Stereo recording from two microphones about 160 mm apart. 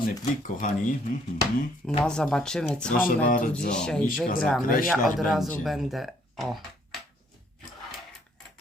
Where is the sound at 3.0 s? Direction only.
60° left (ahead or behind).